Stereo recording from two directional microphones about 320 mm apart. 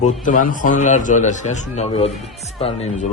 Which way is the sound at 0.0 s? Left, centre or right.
Left.